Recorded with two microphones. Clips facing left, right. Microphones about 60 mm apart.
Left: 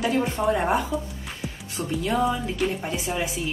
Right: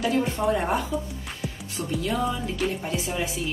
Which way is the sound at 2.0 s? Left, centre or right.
Left.